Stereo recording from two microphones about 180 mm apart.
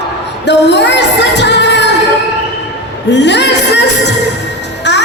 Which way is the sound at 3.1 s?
70° left (ahead or behind).